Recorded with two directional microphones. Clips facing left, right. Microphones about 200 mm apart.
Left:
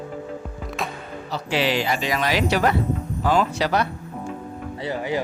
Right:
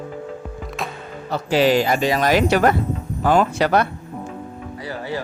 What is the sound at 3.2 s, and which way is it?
Music, 50° right (ahead or behind).